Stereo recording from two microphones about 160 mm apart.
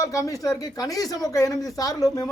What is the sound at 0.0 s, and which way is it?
Speech, 20° left (ahead or behind).